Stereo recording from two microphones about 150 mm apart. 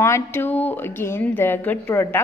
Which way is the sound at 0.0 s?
15° left (ahead or behind).